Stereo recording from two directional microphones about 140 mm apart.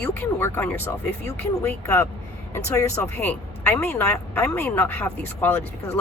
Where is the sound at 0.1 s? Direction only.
15° left (ahead or behind).